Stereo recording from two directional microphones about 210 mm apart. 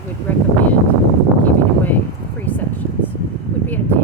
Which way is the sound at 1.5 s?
10° left (ahead or behind).